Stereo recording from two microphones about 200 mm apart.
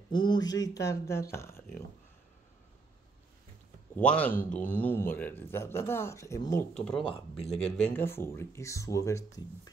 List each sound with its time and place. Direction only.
0.1 s speech: 25° left (ahead or behind)
3.9 s speech: 5° left (ahead or behind)
6.7 s speech: 5° left (ahead or behind)